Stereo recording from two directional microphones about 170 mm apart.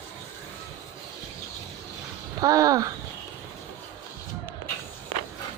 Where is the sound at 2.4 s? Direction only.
20° right (ahead or behind).